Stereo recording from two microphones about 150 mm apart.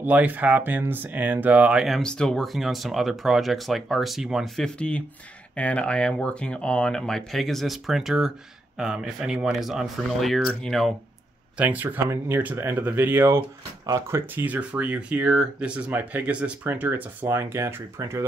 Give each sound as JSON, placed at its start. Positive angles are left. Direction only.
{"t": 0.0, "sound": "speech", "side_deg": -10}
{"t": 11.5, "sound": "speech", "side_deg": -10}